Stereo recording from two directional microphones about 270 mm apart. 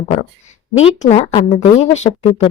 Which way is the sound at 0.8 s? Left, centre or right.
Left.